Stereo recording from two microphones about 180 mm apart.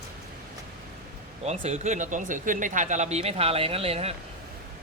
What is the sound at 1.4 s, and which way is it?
Speech, 40° right (ahead or behind).